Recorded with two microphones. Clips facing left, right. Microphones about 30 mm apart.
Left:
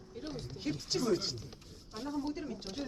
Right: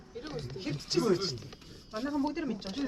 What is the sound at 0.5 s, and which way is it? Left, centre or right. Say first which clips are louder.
Speech: right 4 dB; right.